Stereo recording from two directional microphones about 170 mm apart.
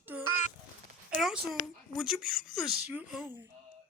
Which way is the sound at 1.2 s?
Centre (ahead or behind).